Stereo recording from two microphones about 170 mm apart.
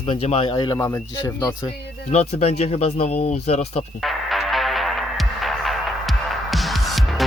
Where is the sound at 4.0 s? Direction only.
Centre (ahead or behind).